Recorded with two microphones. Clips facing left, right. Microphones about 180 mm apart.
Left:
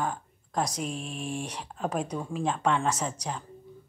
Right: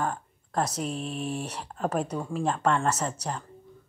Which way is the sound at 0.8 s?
40° right (ahead or behind).